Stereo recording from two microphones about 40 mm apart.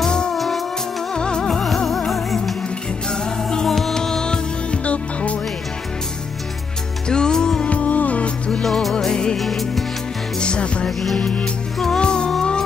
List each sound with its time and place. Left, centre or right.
0.0 s music: centre
0.3 s music: centre
1.1 s music: left
1.9 s music: centre
3.1 s music: centre
4.8 s music: left
7.1 s music: centre
7.6 s music: left
8.6 s music: centre
8.9 s music: centre
9.4 s music: centre
10.4 s music: left
10.9 s music: centre
12.0 s music: left